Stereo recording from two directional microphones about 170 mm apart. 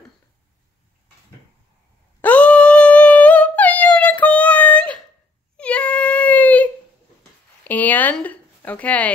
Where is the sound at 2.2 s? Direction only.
10° left (ahead or behind).